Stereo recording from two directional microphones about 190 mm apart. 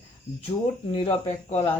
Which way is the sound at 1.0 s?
35° left (ahead or behind).